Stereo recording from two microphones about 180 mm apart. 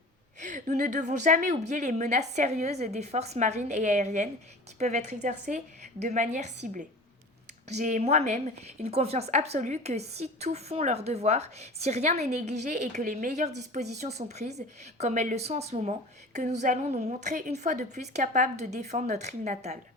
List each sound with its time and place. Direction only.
0.3 s speech: 45° right (ahead or behind)
7.7 s speech: 45° right (ahead or behind)